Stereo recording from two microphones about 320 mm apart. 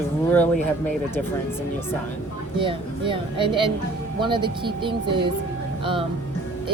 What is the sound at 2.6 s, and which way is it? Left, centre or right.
Speech, centre.